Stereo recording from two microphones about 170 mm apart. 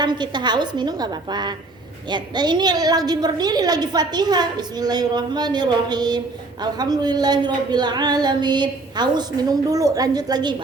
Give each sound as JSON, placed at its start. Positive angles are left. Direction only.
{"t": 0.0, "sound": "a woman's voice", "side_deg": -25}